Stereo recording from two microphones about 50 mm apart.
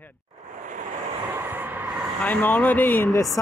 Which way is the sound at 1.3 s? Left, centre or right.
Right.